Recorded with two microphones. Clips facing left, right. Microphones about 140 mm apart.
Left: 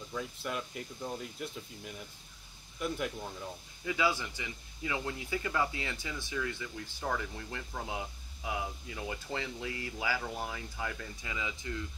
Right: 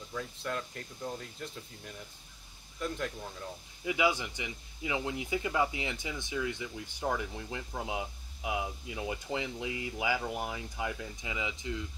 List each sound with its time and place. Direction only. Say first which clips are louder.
0.1 s speech: right 1 dB; 5° left (ahead or behind)
3.8 s speech: right 2 dB; 15° right (ahead or behind)